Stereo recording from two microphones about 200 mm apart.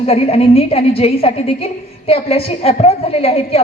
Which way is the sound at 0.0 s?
30° left (ahead or behind).